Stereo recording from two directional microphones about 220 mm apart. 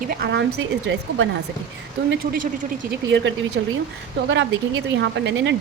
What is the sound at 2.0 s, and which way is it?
Speech, 45° right (ahead or behind).